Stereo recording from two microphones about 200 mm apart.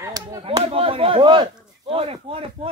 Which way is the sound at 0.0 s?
15° right (ahead or behind).